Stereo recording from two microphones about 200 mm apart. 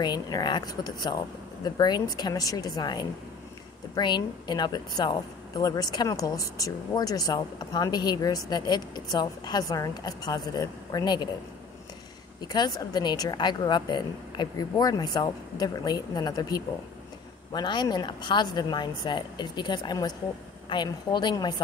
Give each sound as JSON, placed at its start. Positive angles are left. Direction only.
{"t": 0.0, "sound": "speech", "side_deg": 20}
{"t": 12.4, "sound": "speech", "side_deg": 20}